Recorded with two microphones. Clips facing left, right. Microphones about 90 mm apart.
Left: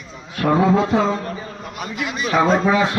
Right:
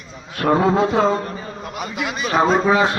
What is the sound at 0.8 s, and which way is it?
Speech, 40° right (ahead or behind).